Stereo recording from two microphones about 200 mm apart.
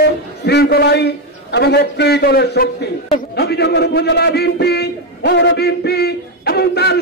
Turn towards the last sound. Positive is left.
turn(degrees=55)  # may be behind; listen again after turning